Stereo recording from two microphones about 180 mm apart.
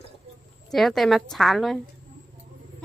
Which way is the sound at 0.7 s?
Centre (ahead or behind).